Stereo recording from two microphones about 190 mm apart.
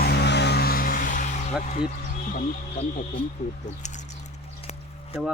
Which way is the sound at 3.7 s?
40° left (ahead or behind).